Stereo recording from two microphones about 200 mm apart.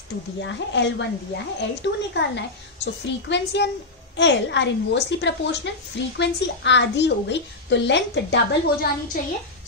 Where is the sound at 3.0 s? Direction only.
60° left (ahead or behind).